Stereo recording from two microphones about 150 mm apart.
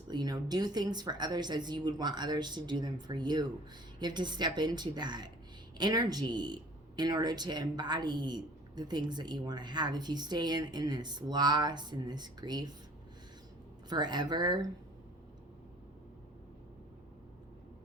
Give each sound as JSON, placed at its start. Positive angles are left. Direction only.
{"t": 0.1, "sound": "speech", "side_deg": -25}
{"t": 13.9, "sound": "speech", "side_deg": -30}